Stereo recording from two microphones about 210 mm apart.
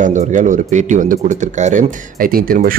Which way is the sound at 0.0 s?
35° right (ahead or behind).